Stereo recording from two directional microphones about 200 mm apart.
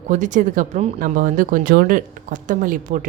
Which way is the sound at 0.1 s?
40° right (ahead or behind).